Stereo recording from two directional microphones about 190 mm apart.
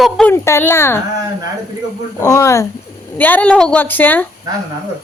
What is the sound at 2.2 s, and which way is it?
A woman's voice, 15° left (ahead or behind).